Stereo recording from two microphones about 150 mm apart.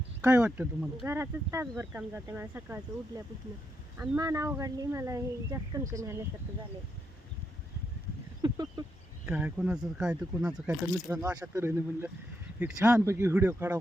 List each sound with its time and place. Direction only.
0.2 s speech: 15° right (ahead or behind)
4.2 s speech: 20° right (ahead or behind)
8.4 s duck: 25° right (ahead or behind)
9.2 s speech: 10° right (ahead or behind)